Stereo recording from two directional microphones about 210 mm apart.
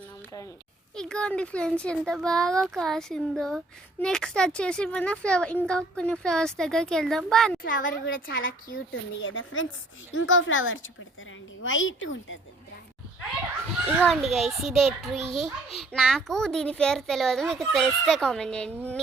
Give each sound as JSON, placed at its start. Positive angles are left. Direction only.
{"t": 0.9, "sound": "speech", "side_deg": 5}
{"t": 7.6, "sound": "a woman's voice", "side_deg": 40}
{"t": 8.9, "sound": "speech", "side_deg": 65}
{"t": 14.0, "sound": "speech", "side_deg": 0}